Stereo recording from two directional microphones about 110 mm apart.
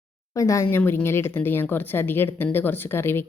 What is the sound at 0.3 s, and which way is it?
A woman's voice, 30° left (ahead or behind).